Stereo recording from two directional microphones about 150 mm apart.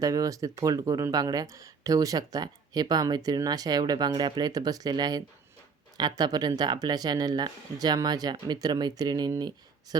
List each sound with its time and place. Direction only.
0.0 s speech: 25° right (ahead or behind)